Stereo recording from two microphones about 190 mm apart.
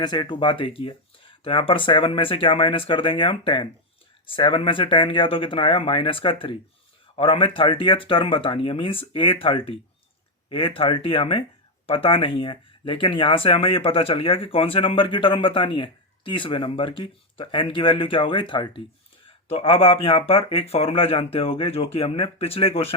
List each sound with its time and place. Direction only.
0.0 s speech: 25° left (ahead or behind)